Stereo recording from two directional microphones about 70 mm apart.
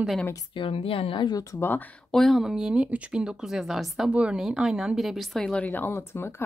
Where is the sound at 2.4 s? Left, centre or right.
Centre.